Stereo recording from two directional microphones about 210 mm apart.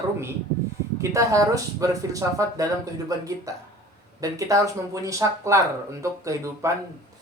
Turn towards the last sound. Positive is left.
turn(degrees=-15)  # may be behind; listen again after turning